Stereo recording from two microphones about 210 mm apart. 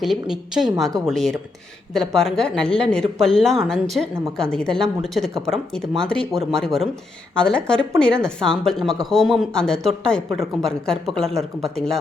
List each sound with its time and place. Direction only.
0.0 s speech: centre (ahead or behind)